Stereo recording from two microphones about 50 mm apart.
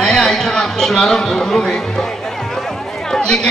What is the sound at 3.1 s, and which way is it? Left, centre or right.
Chatter, centre.